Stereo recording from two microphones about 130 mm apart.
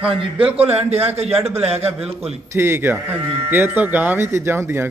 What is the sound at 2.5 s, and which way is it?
Speech, 20° right (ahead or behind).